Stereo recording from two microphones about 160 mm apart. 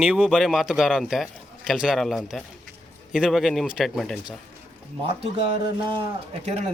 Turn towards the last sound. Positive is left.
turn(degrees=-40)  # may be behind; listen again after turning